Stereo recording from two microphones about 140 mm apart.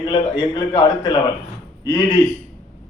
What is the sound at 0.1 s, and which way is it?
A man's voice, 30° left (ahead or behind).